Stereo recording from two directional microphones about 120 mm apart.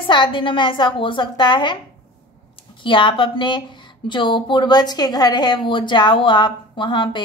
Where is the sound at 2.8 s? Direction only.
45° left (ahead or behind).